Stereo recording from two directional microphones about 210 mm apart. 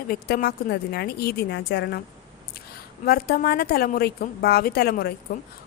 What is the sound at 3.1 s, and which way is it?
Speech, 45° left (ahead or behind).